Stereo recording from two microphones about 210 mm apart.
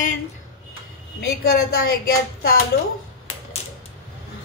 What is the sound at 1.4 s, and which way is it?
A woman's voice, 45° left (ahead or behind).